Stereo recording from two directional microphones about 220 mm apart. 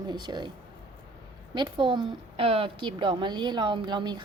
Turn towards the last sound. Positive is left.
turn(degrees=-20)  # may be behind; listen again after turning